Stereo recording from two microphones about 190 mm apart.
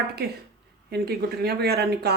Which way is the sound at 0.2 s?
55° right (ahead or behind).